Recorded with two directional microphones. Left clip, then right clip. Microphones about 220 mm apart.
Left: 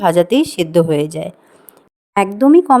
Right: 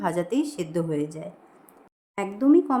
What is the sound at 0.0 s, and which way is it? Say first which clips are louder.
Speech: left 13 dB; 40° left (ahead or behind).